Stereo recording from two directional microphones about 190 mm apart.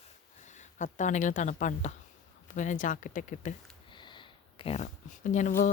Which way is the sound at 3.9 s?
25° left (ahead or behind).